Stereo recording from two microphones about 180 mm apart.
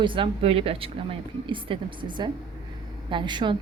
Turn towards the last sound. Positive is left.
turn(degrees=-25)  # may be behind; listen again after turning